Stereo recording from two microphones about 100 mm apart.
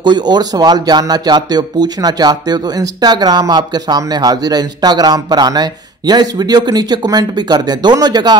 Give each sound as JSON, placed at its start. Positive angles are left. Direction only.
{"t": 0.0, "sound": "speech", "side_deg": -45}